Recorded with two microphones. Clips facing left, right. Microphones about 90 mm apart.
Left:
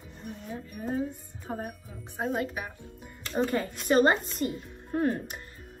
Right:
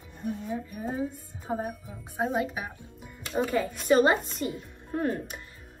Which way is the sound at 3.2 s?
10° right (ahead or behind).